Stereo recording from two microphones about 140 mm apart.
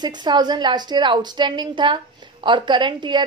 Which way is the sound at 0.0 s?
30° right (ahead or behind).